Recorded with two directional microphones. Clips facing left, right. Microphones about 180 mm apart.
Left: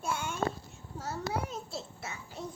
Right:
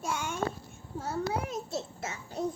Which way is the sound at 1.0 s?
30° right (ahead or behind).